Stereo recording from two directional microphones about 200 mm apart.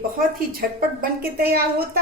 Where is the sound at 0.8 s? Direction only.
50° right (ahead or behind).